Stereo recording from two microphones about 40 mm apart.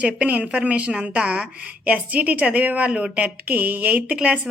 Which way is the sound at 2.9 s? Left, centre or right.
Right.